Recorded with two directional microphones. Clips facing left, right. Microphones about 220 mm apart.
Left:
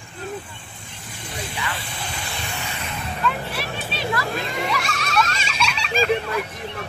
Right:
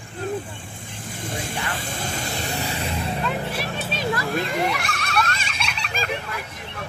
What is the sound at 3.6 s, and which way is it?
Children playing, 45° right (ahead or behind).